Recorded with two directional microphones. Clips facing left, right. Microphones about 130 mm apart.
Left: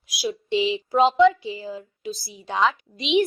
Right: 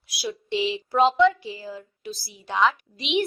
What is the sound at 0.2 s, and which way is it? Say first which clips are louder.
A woman's voice: left 3 dB; 20° left (ahead or behind).